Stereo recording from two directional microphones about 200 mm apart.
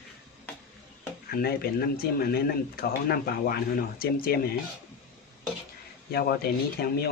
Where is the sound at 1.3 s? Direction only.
50° left (ahead or behind).